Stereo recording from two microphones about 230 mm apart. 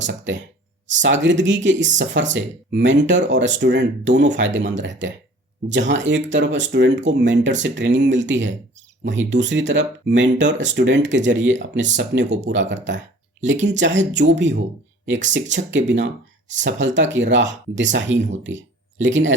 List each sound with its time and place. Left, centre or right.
0.0 s speech: right